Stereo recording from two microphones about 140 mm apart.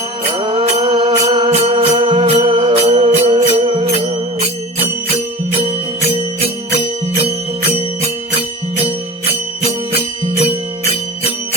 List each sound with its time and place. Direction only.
0.3 s mantra: 40° right (ahead or behind)
1.5 s music: 45° right (ahead or behind)
6.4 s music: 45° right (ahead or behind)